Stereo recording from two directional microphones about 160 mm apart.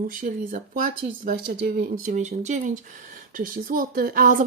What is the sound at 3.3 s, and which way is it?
Speech, 60° right (ahead or behind).